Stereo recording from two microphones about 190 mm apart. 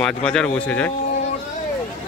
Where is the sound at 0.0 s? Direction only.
5° left (ahead or behind).